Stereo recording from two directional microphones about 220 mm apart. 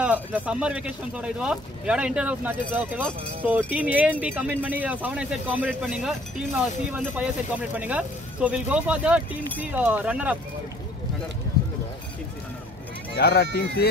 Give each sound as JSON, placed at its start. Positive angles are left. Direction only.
{"t": 0.0, "sound": "speech", "side_deg": -5}
{"t": 13.1, "sound": "speech", "side_deg": 50}